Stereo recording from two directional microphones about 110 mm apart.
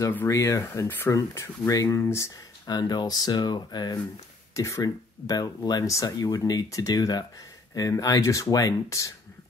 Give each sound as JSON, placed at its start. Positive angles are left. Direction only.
{"t": 0.0, "sound": "speech", "side_deg": 20}
{"t": 2.6, "sound": "speech", "side_deg": 40}
{"t": 4.6, "sound": "speech", "side_deg": 30}